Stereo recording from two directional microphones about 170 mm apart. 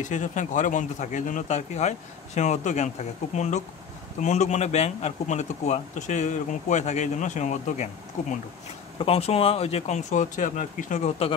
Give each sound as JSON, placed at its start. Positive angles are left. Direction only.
{"t": 0.0, "sound": "speech", "side_deg": 45}